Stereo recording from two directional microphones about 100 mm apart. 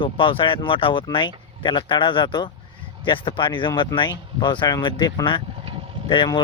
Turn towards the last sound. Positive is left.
turn(degrees=50)  # may be behind; listen again after turning